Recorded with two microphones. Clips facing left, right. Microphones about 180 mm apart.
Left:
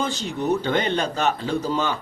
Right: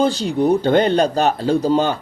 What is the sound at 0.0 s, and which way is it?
Speech, 35° right (ahead or behind).